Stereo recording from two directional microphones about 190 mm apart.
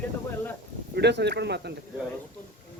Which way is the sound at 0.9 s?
60° right (ahead or behind).